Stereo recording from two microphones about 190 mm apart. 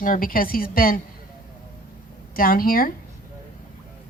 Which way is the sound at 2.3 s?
50° left (ahead or behind).